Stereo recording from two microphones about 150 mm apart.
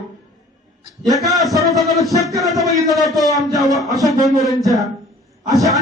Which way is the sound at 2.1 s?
20° right (ahead or behind).